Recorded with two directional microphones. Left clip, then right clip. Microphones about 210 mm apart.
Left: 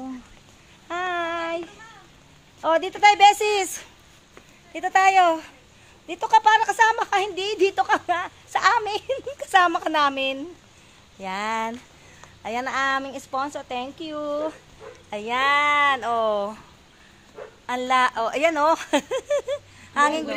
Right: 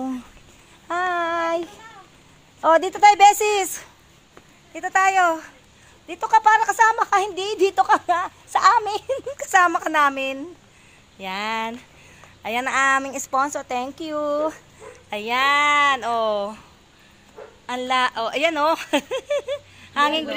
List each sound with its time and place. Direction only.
0.8 s child singing: 30° right (ahead or behind)
2.6 s speech: 35° right (ahead or behind); by 3.9 s 10° right (ahead or behind)
4.7 s a woman's voice: 10° left (ahead or behind)
6.0 s a woman's voice: 5° right (ahead or behind)
12.4 s a woman's voice: 35° right (ahead or behind)
15.0 s speech: 30° right (ahead or behind); by 16.6 s 15° right (ahead or behind)
17.6 s a woman's voice: 10° right (ahead or behind)